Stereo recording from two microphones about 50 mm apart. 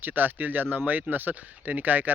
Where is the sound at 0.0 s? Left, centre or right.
Right.